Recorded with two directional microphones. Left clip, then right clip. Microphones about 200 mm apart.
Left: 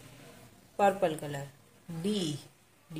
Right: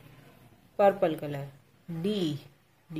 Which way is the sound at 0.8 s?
25° right (ahead or behind).